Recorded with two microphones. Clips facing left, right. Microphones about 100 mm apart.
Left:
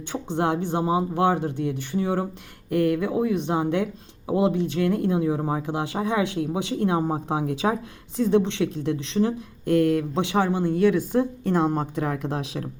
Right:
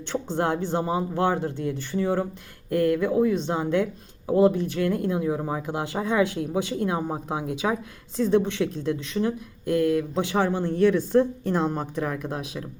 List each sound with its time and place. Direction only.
0.1 s speech: 20° left (ahead or behind)
10.5 s speech: 15° left (ahead or behind)